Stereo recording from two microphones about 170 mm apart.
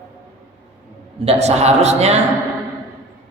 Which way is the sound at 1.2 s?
40° right (ahead or behind).